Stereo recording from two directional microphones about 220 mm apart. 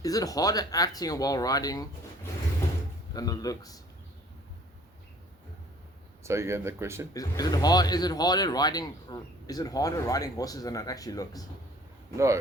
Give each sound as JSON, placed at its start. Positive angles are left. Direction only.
{"t": 0.0, "sound": "speech", "side_deg": 15}
{"t": 3.1, "sound": "speech", "side_deg": 15}
{"t": 6.2, "sound": "speech", "side_deg": -10}
{"t": 7.1, "sound": "speech", "side_deg": 15}
{"t": 12.1, "sound": "speech", "side_deg": -15}